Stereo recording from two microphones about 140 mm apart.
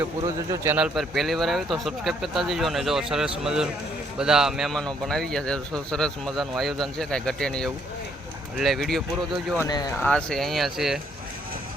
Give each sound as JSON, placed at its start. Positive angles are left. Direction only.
{"t": 0.3, "sound": "speech", "side_deg": -20}
{"t": 0.8, "sound": "speech", "side_deg": 0}
{"t": 9.6, "sound": "speech", "side_deg": 30}
{"t": 10.0, "sound": "speech", "side_deg": 5}